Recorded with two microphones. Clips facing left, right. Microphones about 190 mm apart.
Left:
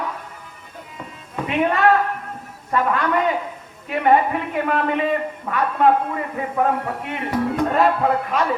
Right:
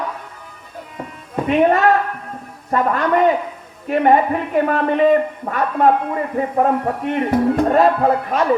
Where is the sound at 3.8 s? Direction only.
40° right (ahead or behind).